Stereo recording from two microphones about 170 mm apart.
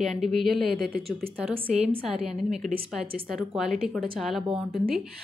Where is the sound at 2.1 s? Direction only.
Centre (ahead or behind).